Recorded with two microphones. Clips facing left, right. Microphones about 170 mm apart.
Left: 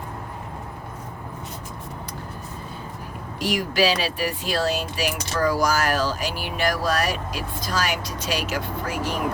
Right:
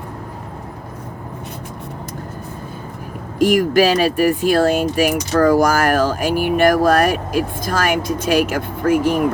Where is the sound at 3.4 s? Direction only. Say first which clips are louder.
Right 9 dB; 50° right (ahead or behind).